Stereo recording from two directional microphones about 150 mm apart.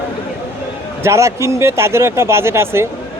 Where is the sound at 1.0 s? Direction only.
20° right (ahead or behind).